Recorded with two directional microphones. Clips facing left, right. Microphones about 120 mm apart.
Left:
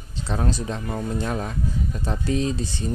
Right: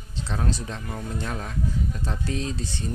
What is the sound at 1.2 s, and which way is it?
Speech, 15° left (ahead or behind).